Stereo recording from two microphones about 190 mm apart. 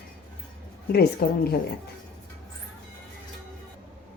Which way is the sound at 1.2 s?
55° left (ahead or behind).